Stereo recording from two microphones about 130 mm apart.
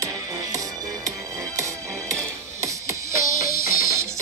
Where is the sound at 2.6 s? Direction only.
25° right (ahead or behind).